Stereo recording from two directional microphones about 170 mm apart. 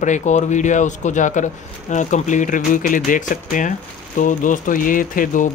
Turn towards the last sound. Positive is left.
turn(degrees=55)  # may be behind; listen again after turning